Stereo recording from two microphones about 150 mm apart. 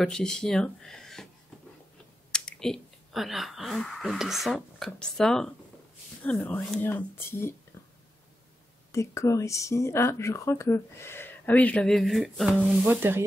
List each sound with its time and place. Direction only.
0.0 s speech: 5° left (ahead or behind)
2.3 s speech: 5° left (ahead or behind)
6.3 s speech: 15° left (ahead or behind)
8.9 s speech: 20° left (ahead or behind); by 12.5 s centre (ahead or behind)
12.5 s sizzle: 10° right (ahead or behind)